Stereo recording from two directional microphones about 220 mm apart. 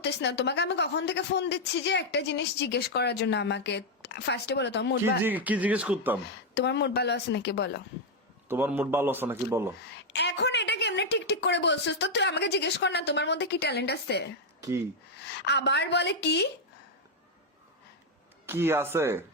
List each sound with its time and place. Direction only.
0.0 s a woman's voice: 50° left (ahead or behind)
5.2 s a man's voice: 5° right (ahead or behind)
6.5 s a woman's voice: 50° left (ahead or behind)
8.4 s a man's voice: 10° right (ahead or behind)
10.1 s a woman's voice: 50° left (ahead or behind)
15.4 s a woman's voice: 50° left (ahead or behind)
18.4 s a man's voice: 10° right (ahead or behind)